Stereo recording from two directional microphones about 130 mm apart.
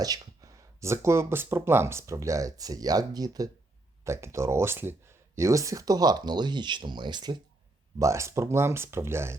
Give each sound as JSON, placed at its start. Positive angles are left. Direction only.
{"t": 0.0, "sound": "speech", "side_deg": -30}
{"t": 7.9, "sound": "speech", "side_deg": -25}